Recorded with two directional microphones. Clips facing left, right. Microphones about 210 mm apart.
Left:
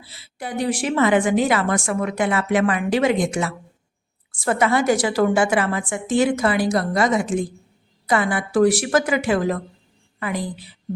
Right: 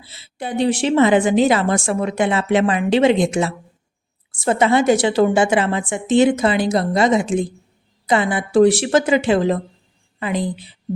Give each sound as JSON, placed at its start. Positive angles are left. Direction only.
{"t": 0.0, "sound": "a woman's voice", "side_deg": -25}